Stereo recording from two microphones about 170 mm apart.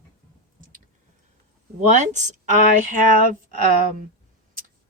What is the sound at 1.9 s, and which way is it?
Speech, 45° right (ahead or behind).